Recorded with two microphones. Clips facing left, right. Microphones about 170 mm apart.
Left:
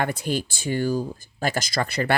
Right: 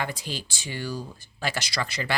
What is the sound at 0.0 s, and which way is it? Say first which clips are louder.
Speech: left 7 dB; 60° left (ahead or behind).